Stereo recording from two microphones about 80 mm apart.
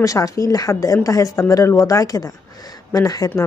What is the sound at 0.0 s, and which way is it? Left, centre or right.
Speech, left.